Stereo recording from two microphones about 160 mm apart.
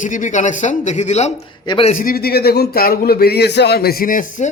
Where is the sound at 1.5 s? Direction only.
30° left (ahead or behind).